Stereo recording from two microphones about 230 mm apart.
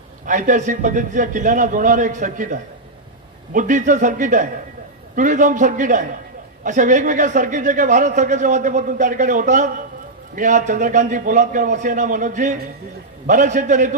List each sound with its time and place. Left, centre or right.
0.3 s a man's voice: right